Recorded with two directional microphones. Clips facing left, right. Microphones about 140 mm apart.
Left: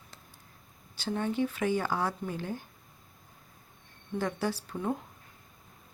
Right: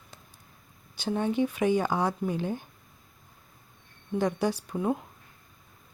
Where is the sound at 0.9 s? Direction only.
15° right (ahead or behind).